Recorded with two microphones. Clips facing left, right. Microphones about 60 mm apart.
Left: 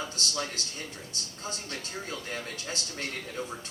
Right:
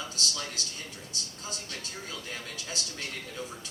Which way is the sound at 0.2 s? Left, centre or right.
Left.